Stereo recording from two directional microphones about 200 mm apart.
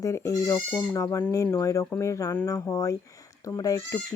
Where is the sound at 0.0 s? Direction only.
15° left (ahead or behind).